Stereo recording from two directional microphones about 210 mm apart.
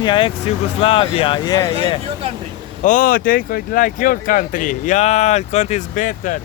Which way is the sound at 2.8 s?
40° left (ahead or behind).